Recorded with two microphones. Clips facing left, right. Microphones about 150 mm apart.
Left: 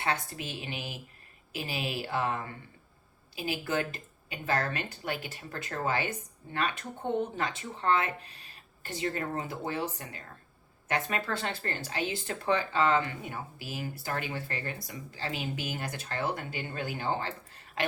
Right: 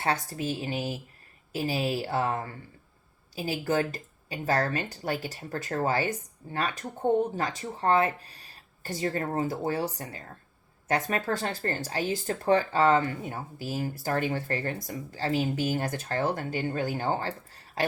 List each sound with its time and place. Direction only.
0.0 s speech: 40° right (ahead or behind)